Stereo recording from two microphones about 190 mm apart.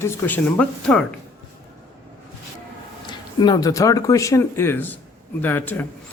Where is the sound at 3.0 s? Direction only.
20° left (ahead or behind).